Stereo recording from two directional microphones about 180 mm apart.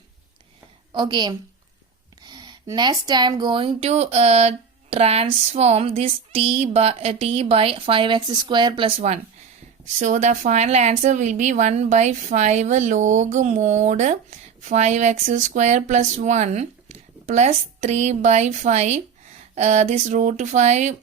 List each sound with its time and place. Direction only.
0.9 s a woman's voice: 25° right (ahead or behind); by 20.9 s 40° right (ahead or behind)